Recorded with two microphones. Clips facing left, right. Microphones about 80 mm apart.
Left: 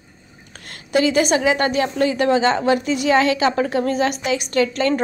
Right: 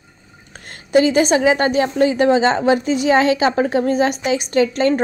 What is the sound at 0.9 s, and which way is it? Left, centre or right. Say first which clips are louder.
Speech: right 3 dB; right.